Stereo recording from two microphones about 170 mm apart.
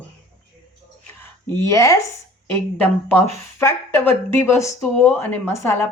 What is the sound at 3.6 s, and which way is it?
A woman's voice, 15° left (ahead or behind).